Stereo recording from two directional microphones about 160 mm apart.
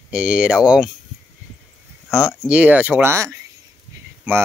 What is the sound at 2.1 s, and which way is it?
Speech, centre (ahead or behind).